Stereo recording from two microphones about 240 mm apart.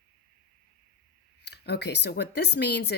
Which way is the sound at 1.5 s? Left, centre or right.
Left.